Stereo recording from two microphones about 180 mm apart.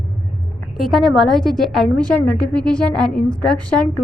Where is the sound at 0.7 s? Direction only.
Centre (ahead or behind).